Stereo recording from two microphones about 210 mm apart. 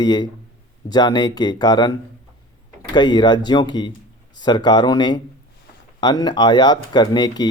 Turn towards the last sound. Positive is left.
turn(degrees=20)  # may be behind; listen again after turning